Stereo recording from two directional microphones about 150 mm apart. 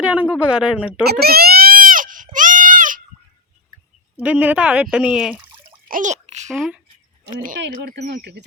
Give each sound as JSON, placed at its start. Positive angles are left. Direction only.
{"t": 0.0, "sound": "speech", "side_deg": -10}
{"t": 1.0, "sound": "baby cry", "side_deg": -90}
{"t": 4.2, "sound": "speech", "side_deg": -10}
{"t": 5.9, "sound": "a sound", "side_deg": -55}
{"t": 6.5, "sound": "speech", "side_deg": 0}
{"t": 7.3, "sound": "speech", "side_deg": -80}